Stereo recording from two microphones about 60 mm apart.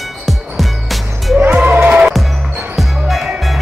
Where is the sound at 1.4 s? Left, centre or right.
Right.